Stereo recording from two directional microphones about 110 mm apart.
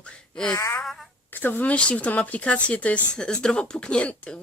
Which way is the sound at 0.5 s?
25° left (ahead or behind).